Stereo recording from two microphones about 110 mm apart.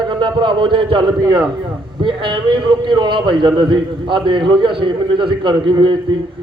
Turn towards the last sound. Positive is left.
turn(degrees=-50)  # may be behind; listen again after turning